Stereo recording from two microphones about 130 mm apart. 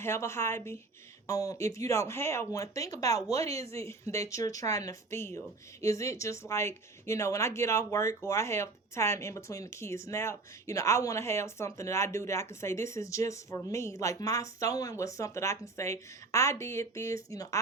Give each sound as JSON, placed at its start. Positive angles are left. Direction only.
{"t": 0.0, "sound": "speech", "side_deg": 20}